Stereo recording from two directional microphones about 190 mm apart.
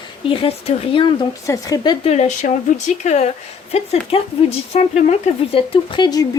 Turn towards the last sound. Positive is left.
turn(degrees=20)  # may be behind; listen again after turning